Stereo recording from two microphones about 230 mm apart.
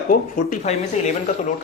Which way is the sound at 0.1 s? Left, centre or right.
Left.